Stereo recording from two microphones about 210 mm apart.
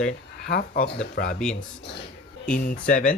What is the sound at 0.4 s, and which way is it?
Speech, 45° left (ahead or behind).